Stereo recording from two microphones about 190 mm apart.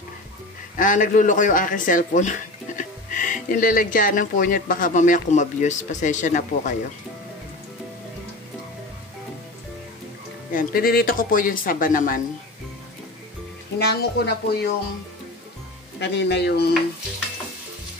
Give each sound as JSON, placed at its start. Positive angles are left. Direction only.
{"t": 0.7, "sound": "speech", "side_deg": 45}
{"t": 10.5, "sound": "speech", "side_deg": 50}
{"t": 13.7, "sound": "speech", "side_deg": 60}
{"t": 16.0, "sound": "speech", "side_deg": 65}